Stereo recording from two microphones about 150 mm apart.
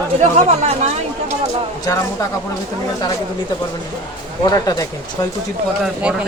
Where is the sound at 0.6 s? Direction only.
50° right (ahead or behind).